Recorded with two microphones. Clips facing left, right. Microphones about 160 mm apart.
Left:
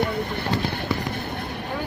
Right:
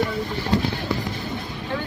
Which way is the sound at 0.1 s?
60° left (ahead or behind).